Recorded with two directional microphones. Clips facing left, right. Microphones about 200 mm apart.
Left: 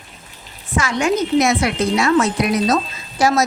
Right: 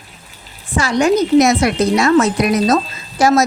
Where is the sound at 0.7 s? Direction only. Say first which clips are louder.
Right 4 dB; 35° right (ahead or behind).